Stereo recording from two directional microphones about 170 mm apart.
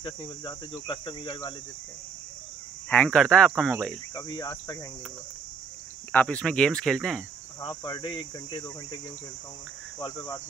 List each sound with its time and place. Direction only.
0.0 s cricket: 25° left (ahead or behind)
2.9 s speech: 10° left (ahead or behind)
4.1 s cricket: 25° left (ahead or behind)
6.1 s speech: 5° left (ahead or behind)
7.6 s cricket: 25° left (ahead or behind)